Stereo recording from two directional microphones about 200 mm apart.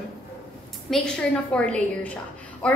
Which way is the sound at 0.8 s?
5° left (ahead or behind).